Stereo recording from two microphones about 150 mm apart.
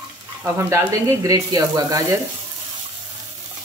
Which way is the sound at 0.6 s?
20° right (ahead or behind).